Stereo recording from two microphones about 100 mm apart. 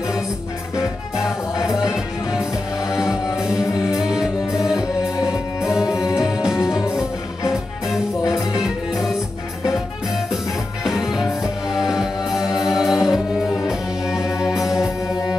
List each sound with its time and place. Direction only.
1.6 s music: 35° left (ahead or behind)
2.9 s music: 5° right (ahead or behind)
8.5 s music: 5° right (ahead or behind)
10.3 s music: centre (ahead or behind)